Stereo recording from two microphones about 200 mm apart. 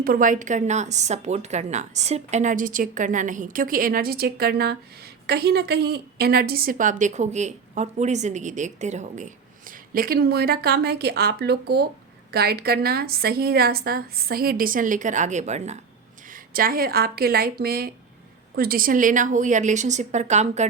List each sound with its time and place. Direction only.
0.0 s a woman's voice: 45° right (ahead or behind)
16.3 s a woman's voice: 45° right (ahead or behind)